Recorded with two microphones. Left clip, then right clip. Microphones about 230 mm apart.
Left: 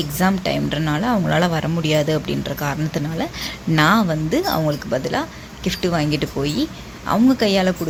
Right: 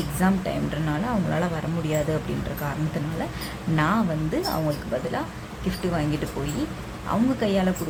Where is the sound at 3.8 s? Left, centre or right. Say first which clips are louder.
Left 8 dB; left.